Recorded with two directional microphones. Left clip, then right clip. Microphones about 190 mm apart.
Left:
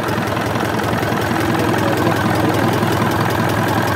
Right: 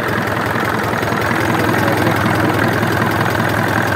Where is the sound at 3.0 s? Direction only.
5° left (ahead or behind).